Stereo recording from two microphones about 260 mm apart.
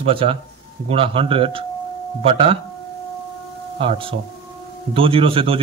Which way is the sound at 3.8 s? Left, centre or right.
Right.